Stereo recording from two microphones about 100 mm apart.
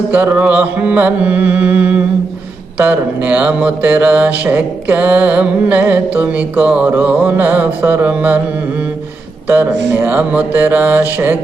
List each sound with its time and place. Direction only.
0.1 s mantra: 15° right (ahead or behind)
9.5 s mantra: 20° right (ahead or behind)